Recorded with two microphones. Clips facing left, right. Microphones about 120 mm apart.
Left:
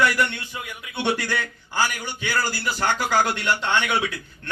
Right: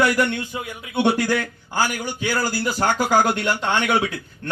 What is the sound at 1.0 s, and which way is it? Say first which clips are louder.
Speech: right 4 dB; 45° right (ahead or behind).